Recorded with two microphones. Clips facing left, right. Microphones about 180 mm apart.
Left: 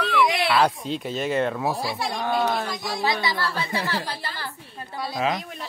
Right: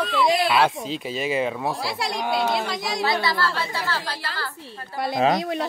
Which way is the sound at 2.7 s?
85° right.